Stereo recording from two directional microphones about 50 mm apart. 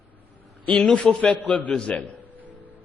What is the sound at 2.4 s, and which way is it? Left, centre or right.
Music, right.